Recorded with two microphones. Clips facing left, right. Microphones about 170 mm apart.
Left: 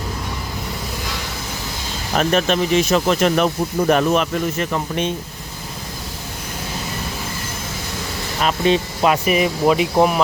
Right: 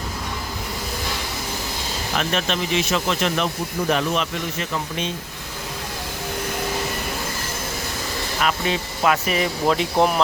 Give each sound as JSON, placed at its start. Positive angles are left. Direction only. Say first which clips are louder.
{"t": 2.1, "sound": "speech", "louder": "left 7 dB", "side_deg": 45}
{"t": 8.4, "sound": "speech", "louder": "left 6 dB", "side_deg": 25}